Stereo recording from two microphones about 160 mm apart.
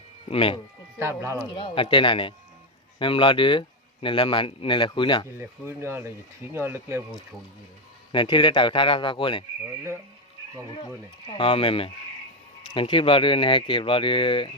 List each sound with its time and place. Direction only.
0.3 s speech: 35° left (ahead or behind)
0.9 s speech: 15° right (ahead or behind)
1.5 s speech: 30° left (ahead or behind)
5.4 s speech: 15° right (ahead or behind)
8.1 s speech: 30° left (ahead or behind)
11.3 s speech: 35° left (ahead or behind)